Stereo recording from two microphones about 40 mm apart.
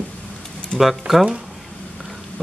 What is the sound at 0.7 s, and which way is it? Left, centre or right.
Speech, centre.